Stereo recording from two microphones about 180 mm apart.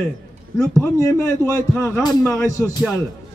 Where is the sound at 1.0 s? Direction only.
15° left (ahead or behind).